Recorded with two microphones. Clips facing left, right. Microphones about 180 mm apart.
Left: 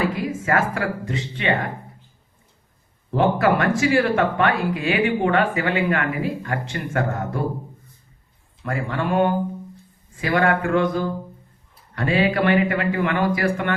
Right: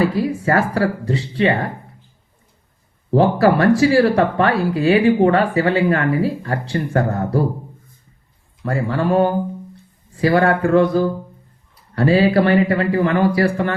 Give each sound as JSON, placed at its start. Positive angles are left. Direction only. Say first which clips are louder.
{"t": 0.0, "sound": "speech", "louder": "right 6 dB", "side_deg": -35}
{"t": 3.1, "sound": "speech", "louder": "right 4 dB", "side_deg": -35}
{"t": 8.6, "sound": "speech", "louder": "right 5 dB", "side_deg": -35}